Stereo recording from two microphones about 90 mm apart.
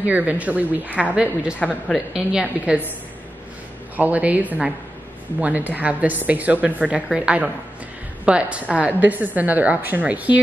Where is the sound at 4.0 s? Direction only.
20° right (ahead or behind).